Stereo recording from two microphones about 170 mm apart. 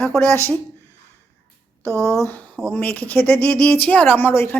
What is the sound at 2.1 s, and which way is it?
A woman's voice, 15° left (ahead or behind).